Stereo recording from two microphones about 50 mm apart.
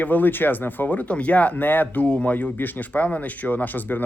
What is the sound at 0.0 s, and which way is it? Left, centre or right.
Speech, left.